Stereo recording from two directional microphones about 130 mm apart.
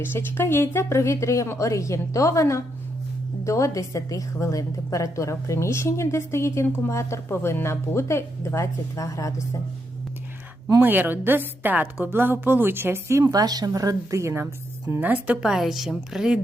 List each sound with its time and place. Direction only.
0.0 s a woman's voice: 15° left (ahead or behind)
10.7 s a woman's voice: 15° right (ahead or behind)
13.2 s a woman's voice: 30° right (ahead or behind); by 16.4 s 5° right (ahead or behind)